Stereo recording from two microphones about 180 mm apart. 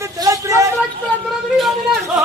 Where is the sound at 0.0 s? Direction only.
15° right (ahead or behind).